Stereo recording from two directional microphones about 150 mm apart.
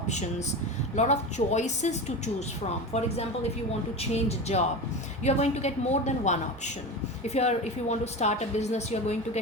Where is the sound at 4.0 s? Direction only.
45° left (ahead or behind).